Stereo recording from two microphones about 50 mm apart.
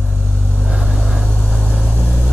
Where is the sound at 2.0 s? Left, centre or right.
Centre.